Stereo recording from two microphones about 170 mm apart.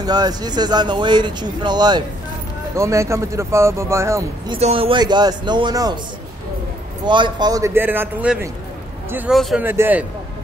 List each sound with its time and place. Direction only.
0.0 s speech: 25° right (ahead or behind)
4.5 s speech: 35° right (ahead or behind)
7.1 s speech: 25° right (ahead or behind); by 10.0 s 10° right (ahead or behind)